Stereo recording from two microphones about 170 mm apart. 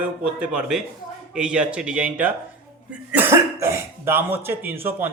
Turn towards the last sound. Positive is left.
turn(degrees=-10)  # may be behind; listen again after turning